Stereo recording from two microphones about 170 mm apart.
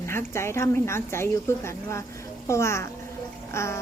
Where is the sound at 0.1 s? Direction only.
15° left (ahead or behind).